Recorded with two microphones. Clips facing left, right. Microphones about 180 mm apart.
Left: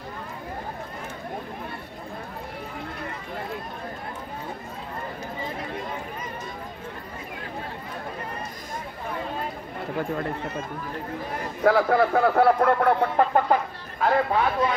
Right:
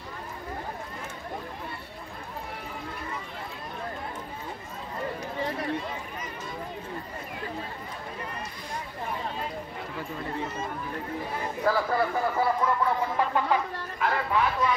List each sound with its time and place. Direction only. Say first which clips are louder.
9.9 s speech: left 6 dB; 60° left (ahead or behind)
11.6 s speech: left 7 dB; 65° left (ahead or behind); by 14.4 s 45° left (ahead or behind)